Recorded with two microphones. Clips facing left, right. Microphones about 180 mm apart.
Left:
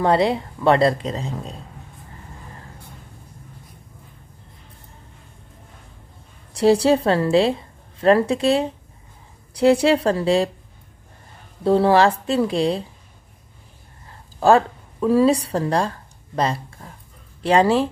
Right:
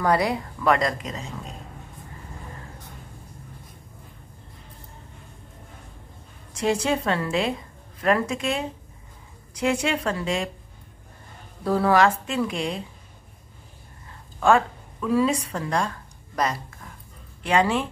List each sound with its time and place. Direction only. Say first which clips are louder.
0.0 s speech: left 4 dB; 25° left (ahead or behind)
6.5 s a woman's voice: left 8 dB; 35° left (ahead or behind)
11.6 s speech: left 4 dB; 30° left (ahead or behind)
14.4 s a woman's voice: left 4 dB; 35° left (ahead or behind)